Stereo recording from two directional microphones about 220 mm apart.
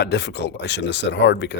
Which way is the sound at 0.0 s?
50° left (ahead or behind).